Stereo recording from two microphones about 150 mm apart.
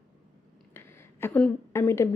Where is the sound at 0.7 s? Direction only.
15° left (ahead or behind).